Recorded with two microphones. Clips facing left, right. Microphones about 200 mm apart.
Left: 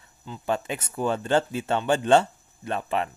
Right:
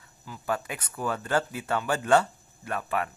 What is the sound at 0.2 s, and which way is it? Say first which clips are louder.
Speech: left 3 dB; 25° left (ahead or behind).